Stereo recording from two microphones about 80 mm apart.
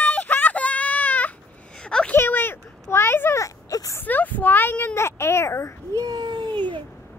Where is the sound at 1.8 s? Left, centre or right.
Centre.